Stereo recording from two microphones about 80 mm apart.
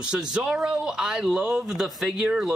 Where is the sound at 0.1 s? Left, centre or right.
Centre.